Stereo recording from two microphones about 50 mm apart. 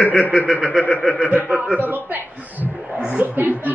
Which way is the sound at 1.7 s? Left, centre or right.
Right.